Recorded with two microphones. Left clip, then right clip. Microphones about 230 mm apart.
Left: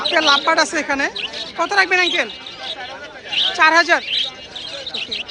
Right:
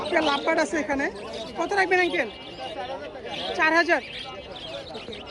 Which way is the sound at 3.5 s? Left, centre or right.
Centre.